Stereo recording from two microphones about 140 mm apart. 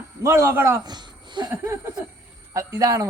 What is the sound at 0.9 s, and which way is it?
Speech, 30° right (ahead or behind).